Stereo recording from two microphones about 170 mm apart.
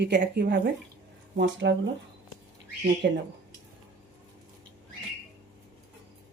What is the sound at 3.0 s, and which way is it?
Speech, 80° right.